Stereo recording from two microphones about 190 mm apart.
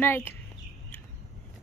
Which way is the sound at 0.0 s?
10° left (ahead or behind).